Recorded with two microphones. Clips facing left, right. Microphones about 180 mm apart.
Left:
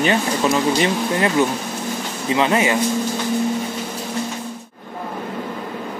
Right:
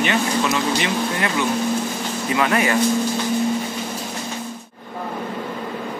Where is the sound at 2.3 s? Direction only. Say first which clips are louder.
Left 2 dB; 25° left (ahead or behind).